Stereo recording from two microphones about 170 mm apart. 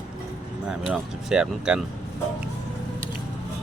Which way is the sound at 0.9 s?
5° right (ahead or behind).